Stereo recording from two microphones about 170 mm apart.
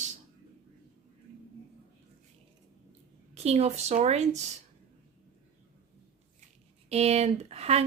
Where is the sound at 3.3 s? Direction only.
40° right (ahead or behind).